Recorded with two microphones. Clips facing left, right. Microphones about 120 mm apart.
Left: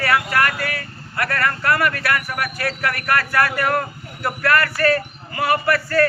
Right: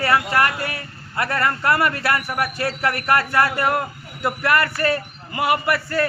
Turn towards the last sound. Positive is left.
turn(degrees=-20)  # may be behind; listen again after turning